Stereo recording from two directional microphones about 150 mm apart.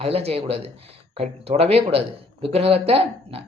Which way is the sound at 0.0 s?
40° right (ahead or behind).